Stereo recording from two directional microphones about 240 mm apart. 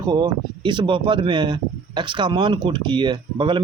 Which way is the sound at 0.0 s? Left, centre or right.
Centre.